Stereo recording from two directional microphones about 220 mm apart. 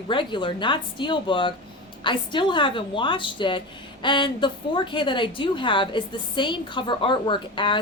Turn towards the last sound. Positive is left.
turn(degrees=20)  # may be behind; listen again after turning